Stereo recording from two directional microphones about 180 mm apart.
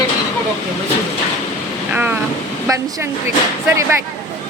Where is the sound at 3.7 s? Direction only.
15° right (ahead or behind).